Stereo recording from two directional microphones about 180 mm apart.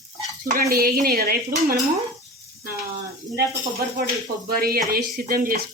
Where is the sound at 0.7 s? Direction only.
55° right (ahead or behind).